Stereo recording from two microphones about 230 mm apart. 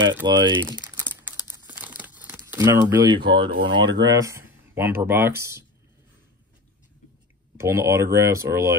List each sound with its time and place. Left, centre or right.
0.2 s crumpling: centre
3.3 s speech: right
7.5 s speech: centre